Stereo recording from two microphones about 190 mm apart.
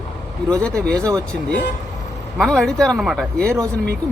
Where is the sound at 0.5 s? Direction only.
5° left (ahead or behind).